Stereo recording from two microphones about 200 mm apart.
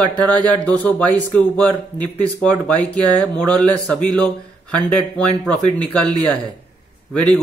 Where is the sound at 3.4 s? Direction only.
5° left (ahead or behind).